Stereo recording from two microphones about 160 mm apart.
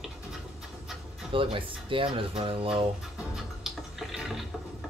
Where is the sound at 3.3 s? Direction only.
Centre (ahead or behind).